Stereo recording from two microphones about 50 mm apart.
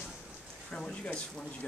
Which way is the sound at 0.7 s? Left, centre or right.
Left.